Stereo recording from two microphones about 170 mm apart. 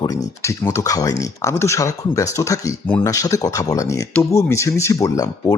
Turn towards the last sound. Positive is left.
turn(degrees=20)  # may be behind; listen again after turning